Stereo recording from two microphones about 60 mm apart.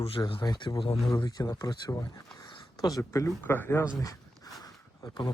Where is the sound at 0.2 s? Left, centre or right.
Left.